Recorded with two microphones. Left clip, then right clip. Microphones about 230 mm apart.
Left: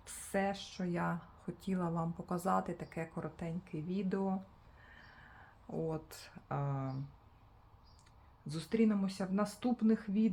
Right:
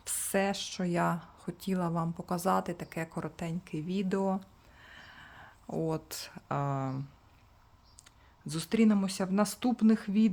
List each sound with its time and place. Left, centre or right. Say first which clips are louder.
0.0 s speech: right 6 dB; right
8.4 s speech: right 5 dB; right